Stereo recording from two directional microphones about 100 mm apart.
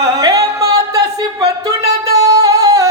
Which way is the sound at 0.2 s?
40° right (ahead or behind).